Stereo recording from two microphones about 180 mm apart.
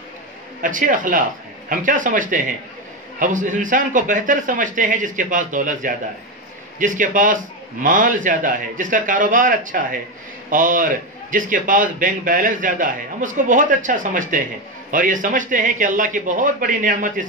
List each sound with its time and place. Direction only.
0.6 s a man's voice: 45° right (ahead or behind)